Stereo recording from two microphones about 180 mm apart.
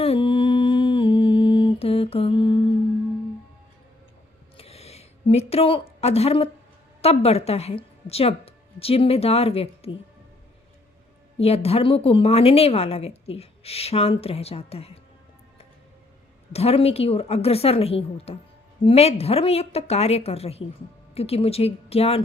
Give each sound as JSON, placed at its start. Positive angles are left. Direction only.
{"t": 0.0, "sound": "humming", "side_deg": 30}
{"t": 4.5, "sound": "a sound", "side_deg": 35}
{"t": 7.0, "sound": "a woman's voice", "side_deg": 35}
{"t": 11.3, "sound": "a woman's voice", "side_deg": 35}
{"t": 16.5, "sound": "a woman's voice", "side_deg": 35}